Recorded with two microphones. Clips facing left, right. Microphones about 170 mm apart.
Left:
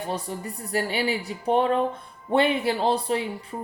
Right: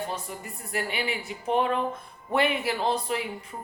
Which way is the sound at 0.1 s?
35° left (ahead or behind).